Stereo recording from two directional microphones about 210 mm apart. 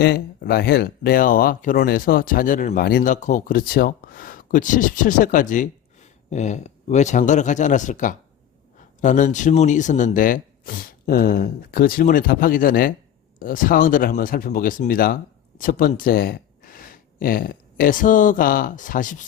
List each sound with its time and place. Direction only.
0.0 s speech: 45° left (ahead or behind)